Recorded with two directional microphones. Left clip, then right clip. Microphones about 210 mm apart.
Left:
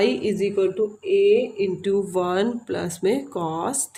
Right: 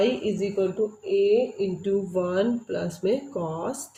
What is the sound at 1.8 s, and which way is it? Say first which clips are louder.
Speech: left 2 dB; 50° left (ahead or behind).